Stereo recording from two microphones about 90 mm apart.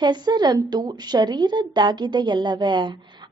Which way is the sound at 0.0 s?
55° right (ahead or behind).